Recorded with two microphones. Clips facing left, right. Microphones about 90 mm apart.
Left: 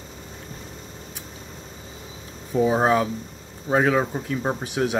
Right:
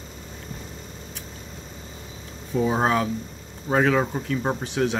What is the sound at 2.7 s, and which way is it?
Speech, 20° left (ahead or behind).